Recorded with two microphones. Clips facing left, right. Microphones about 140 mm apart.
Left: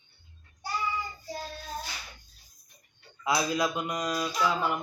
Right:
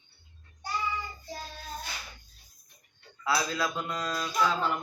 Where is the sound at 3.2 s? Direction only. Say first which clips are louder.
Left 2 dB; 15° left (ahead or behind).